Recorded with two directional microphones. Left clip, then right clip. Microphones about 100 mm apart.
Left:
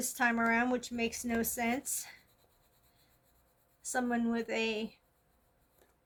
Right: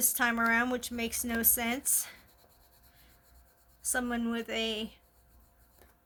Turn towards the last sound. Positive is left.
turn(degrees=-40)  # may be behind; listen again after turning